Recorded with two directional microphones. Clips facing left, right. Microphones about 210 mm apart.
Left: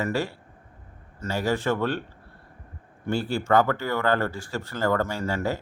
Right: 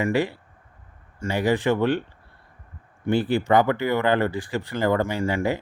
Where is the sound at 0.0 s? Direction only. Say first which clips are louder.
Right 4 dB; 15° right (ahead or behind).